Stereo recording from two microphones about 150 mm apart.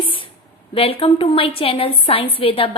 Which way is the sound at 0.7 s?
40° left (ahead or behind).